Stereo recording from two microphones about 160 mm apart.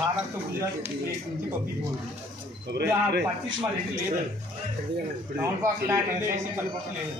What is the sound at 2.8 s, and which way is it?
Speech, 90° right.